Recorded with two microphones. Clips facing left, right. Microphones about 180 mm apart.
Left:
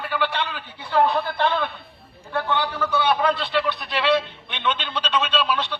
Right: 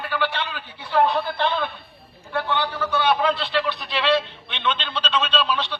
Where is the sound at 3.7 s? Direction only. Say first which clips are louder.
Even; 10° left (ahead or behind).